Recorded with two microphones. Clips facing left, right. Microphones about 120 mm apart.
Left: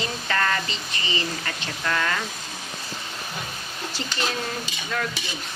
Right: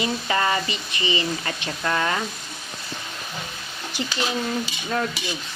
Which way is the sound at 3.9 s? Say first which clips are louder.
Right 6 dB; 15° right (ahead or behind).